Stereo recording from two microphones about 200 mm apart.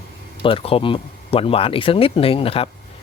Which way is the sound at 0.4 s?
25° left (ahead or behind).